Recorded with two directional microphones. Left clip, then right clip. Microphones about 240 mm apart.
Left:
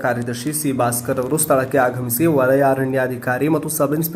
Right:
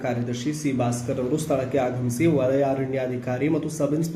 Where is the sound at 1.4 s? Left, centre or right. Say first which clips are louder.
Left 9 dB; left.